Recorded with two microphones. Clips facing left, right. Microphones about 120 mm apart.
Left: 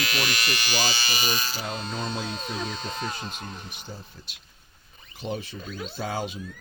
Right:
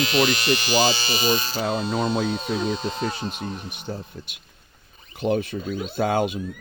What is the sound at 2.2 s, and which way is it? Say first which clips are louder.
Speech: right 8 dB; centre (ahead or behind).